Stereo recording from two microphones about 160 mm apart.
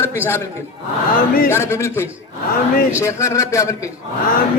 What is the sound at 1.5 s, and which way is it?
Speech, 15° left (ahead or behind).